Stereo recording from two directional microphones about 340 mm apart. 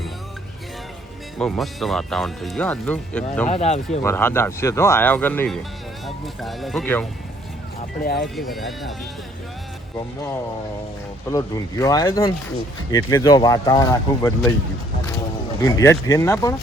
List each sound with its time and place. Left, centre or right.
1.4 s speech: centre
3.5 s speech: centre
4.0 s speech: centre
8.0 s speech: left
8.4 s speech: centre
11.3 s speech: centre
15.6 s speech: centre